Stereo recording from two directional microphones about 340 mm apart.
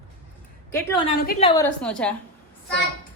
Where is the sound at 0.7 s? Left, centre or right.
Centre.